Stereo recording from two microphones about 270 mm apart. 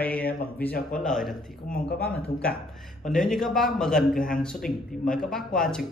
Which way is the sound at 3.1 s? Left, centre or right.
Centre.